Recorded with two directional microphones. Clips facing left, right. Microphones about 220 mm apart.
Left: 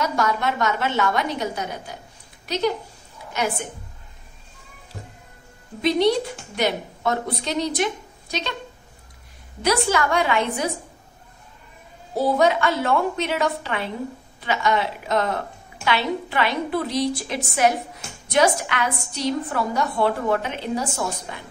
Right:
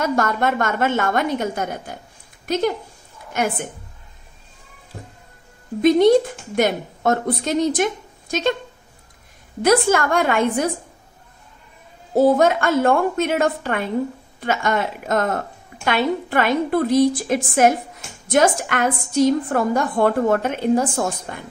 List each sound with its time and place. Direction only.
0.0 s a woman's voice: 50° right (ahead or behind)
5.8 s a woman's voice: 50° right (ahead or behind)
9.6 s a woman's voice: 50° right (ahead or behind)
12.2 s a woman's voice: 50° right (ahead or behind)